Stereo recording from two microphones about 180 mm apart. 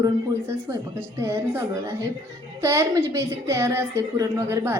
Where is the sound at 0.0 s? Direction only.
15° right (ahead or behind).